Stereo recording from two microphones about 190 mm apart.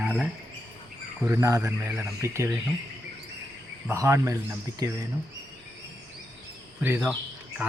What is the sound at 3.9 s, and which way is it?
Speech, 15° right (ahead or behind).